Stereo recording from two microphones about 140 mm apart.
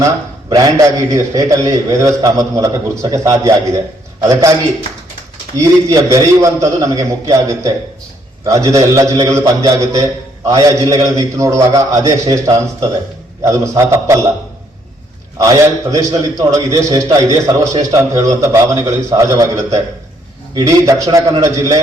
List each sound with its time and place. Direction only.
0.5 s a man's voice: 25° right (ahead or behind)
5.5 s a man's voice: 20° right (ahead or behind)
15.4 s a man's voice: 25° right (ahead or behind)